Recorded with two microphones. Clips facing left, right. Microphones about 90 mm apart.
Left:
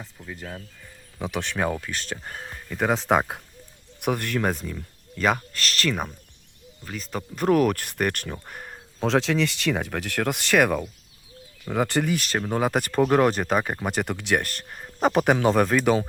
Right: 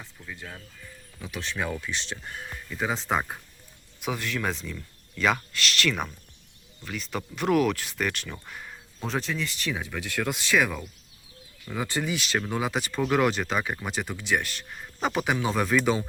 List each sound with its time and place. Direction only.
0.3 s speech: 30° left (ahead or behind)
1.2 s speech: 65° left (ahead or behind)
1.5 s speech: 45° left (ahead or behind)
4.4 s speech: 40° left (ahead or behind)
9.0 s speech: 85° left; by 13.0 s 50° left (ahead or behind)
13.0 s speech: 40° left (ahead or behind)
14.8 s a sound: 25° left (ahead or behind)
15.0 s speech: 45° left (ahead or behind)